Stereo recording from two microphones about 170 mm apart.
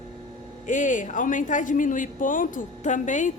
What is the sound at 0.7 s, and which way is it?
Speech, 50° left (ahead or behind).